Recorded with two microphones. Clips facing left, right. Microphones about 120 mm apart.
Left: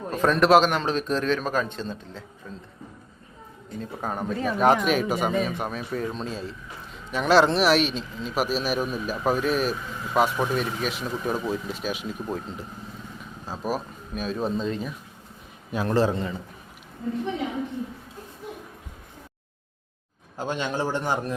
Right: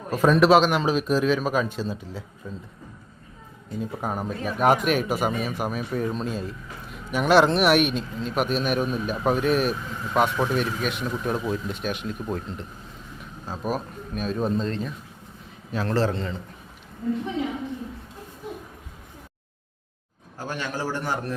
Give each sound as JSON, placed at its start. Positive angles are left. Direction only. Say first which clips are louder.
{"t": 0.1, "sound": "a man's voice", "louder": "right 1 dB", "side_deg": -5}
{"t": 3.8, "sound": "a man's voice", "louder": "right 2 dB", "side_deg": -5}
{"t": 20.3, "sound": "a man's voice", "louder": "left 3 dB", "side_deg": 20}